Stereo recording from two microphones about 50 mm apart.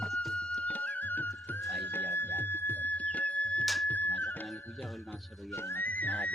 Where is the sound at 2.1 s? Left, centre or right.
Left.